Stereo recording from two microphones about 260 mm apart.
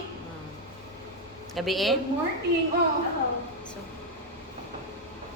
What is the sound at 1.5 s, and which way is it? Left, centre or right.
Speech, centre.